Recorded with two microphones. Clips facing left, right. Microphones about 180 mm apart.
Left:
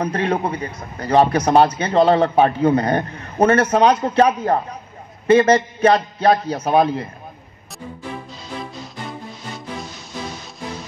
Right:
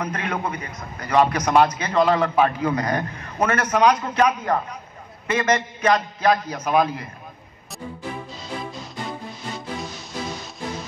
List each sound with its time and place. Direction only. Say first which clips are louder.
0.0 s a man's voice: left 6 dB; 30° left (ahead or behind)